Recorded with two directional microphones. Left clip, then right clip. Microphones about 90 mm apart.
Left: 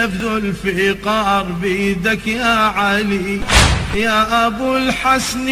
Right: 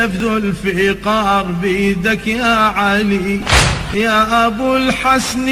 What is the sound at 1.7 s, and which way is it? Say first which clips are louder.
Speech: right 1 dB; 25° right (ahead or behind).